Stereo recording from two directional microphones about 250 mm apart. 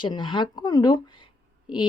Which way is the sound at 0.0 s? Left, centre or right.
Centre.